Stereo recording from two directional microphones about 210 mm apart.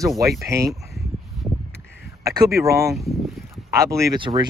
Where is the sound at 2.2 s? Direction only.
15° right (ahead or behind).